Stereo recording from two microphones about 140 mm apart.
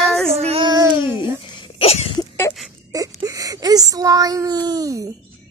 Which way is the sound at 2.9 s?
25° right (ahead or behind).